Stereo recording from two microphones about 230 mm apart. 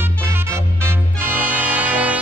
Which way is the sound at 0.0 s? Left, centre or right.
Centre.